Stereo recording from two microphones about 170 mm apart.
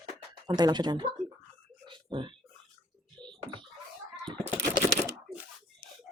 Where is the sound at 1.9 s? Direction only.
30° right (ahead or behind).